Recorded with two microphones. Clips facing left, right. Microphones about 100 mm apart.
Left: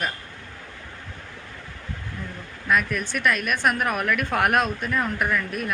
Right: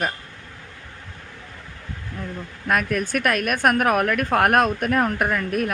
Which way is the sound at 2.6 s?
50° right (ahead or behind).